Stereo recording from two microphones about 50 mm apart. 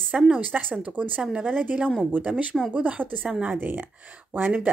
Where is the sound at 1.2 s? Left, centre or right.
Centre; by 3.8 s right.